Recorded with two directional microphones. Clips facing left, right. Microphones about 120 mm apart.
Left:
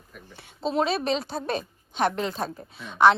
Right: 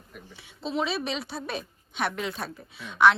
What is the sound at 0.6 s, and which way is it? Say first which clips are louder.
A woman's voice: left 4 dB; 45° left (ahead or behind).